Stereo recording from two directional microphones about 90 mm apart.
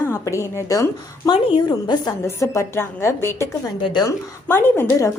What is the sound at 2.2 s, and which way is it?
A woman's voice, 35° left (ahead or behind).